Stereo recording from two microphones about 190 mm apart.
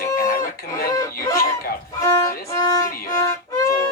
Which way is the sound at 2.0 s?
15° left (ahead or behind).